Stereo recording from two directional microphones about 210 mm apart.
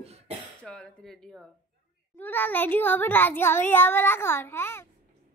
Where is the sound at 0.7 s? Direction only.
5° left (ahead or behind).